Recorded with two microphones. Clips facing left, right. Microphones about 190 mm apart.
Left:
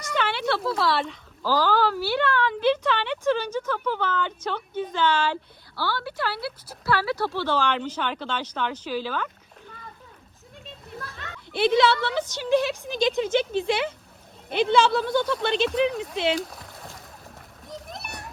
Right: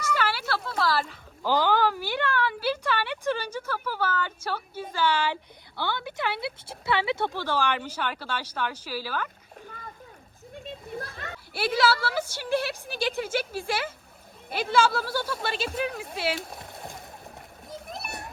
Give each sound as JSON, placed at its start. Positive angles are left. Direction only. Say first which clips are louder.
{"t": 0.1, "sound": "a sound", "louder": "left 4 dB", "side_deg": -5}
{"t": 1.4, "sound": "speech", "louder": "left 1 dB", "side_deg": -15}
{"t": 7.4, "sound": "speech", "louder": "left 4 dB", "side_deg": -10}
{"t": 10.5, "sound": "splash", "louder": "right 5 dB", "side_deg": -55}
{"t": 11.5, "sound": "speech", "louder": "left 5 dB", "side_deg": -5}
{"t": 16.5, "sound": "a sound", "louder": "right 2 dB", "side_deg": -25}
{"t": 17.7, "sound": "splash", "louder": "even", "side_deg": -5}